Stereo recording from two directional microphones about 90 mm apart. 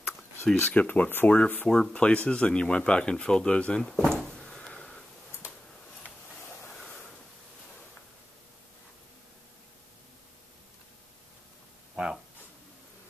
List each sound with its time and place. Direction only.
0.6 s speech: 20° left (ahead or behind)
3.8 s drawer open or close: 5° left (ahead or behind)
6.7 s waves: 10° left (ahead or behind)
11.9 s a sound: 5° right (ahead or behind)